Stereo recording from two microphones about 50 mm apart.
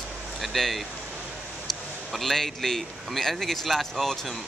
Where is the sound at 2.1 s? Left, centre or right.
Centre.